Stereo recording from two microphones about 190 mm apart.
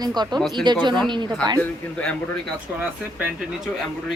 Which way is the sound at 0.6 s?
25° right (ahead or behind).